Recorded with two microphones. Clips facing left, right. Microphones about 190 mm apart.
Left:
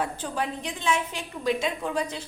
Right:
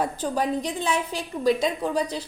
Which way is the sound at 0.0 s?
40° right (ahead or behind).